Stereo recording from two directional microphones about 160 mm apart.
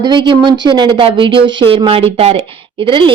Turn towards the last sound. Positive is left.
turn(degrees=-30)  # may be behind; listen again after turning